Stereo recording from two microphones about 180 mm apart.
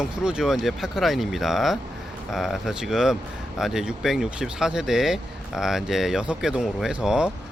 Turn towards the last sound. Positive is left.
turn(degrees=-5)  # may be behind; listen again after turning